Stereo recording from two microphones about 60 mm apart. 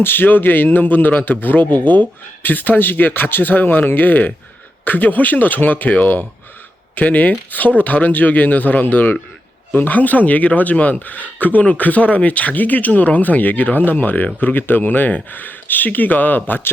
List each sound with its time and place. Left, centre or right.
0.0 s a man's voice: left